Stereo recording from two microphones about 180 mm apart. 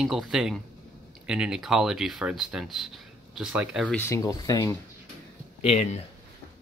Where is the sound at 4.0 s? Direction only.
15° left (ahead or behind).